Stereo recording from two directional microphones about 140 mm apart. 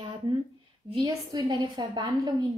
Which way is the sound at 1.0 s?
30° right (ahead or behind).